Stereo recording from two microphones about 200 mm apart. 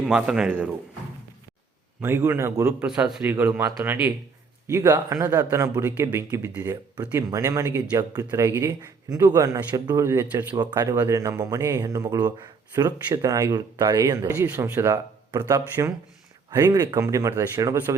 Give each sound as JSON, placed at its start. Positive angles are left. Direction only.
{"t": 0.0, "sound": "speech", "side_deg": -5}
{"t": 2.0, "sound": "a man's voice", "side_deg": -10}